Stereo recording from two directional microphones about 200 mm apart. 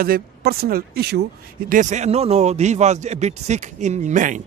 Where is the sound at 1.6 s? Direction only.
40° right (ahead or behind).